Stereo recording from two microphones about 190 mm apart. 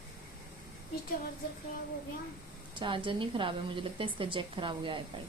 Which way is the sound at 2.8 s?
25° right (ahead or behind).